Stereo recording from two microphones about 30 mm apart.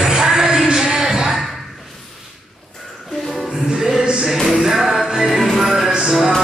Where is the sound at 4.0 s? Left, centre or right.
Right.